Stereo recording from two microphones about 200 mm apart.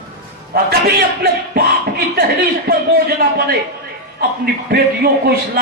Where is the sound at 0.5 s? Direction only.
50° right (ahead or behind).